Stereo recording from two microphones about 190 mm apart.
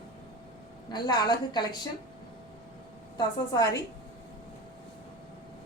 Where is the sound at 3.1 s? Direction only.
20° left (ahead or behind).